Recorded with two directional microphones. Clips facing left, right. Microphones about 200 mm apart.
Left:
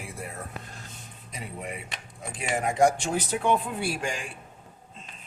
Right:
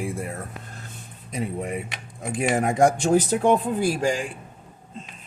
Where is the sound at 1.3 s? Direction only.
45° right (ahead or behind).